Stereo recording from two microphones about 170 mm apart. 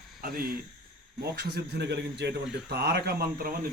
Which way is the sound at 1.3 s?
75° right (ahead or behind).